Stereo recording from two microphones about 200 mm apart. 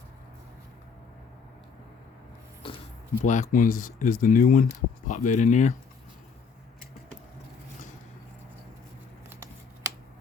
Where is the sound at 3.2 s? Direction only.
40° left (ahead or behind).